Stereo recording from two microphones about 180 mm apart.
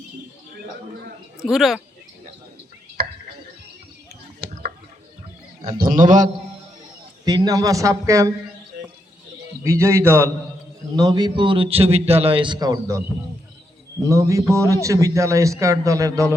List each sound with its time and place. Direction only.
1.4 s speech: centre (ahead or behind)
3.0 s a sound: 60° right (ahead or behind)
4.4 s a sound: 60° right (ahead or behind)
5.7 s a man's voice: 50° right (ahead or behind)
7.3 s a man's voice: 20° right (ahead or behind)
9.6 s a man's voice: 15° right (ahead or behind)
14.1 s a man's voice: 15° right (ahead or behind)